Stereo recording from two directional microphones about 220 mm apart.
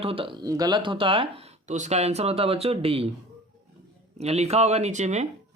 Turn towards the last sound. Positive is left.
turn(degrees=-30)  # may be behind; listen again after turning